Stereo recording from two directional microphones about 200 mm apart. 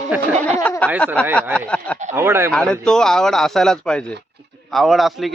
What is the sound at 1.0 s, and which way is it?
Speech, 5° left (ahead or behind).